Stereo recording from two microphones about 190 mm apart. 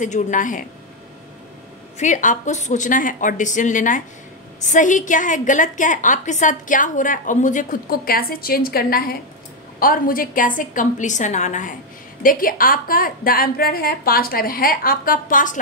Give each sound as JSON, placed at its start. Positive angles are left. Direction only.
{"t": 0.0, "sound": "a woman's voice", "side_deg": 40}
{"t": 2.0, "sound": "a woman's voice", "side_deg": 40}